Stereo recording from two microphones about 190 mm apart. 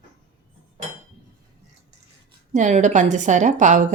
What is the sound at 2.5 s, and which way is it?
A woman's voice, 40° right (ahead or behind).